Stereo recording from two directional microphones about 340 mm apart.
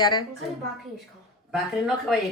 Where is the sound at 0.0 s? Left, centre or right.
Centre.